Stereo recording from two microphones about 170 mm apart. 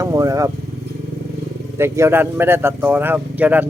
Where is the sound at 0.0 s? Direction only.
20° right (ahead or behind).